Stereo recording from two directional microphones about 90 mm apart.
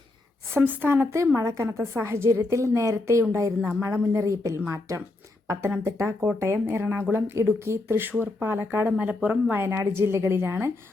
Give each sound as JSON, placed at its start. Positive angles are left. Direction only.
{"t": 0.5, "sound": "a woman's voice", "side_deg": -20}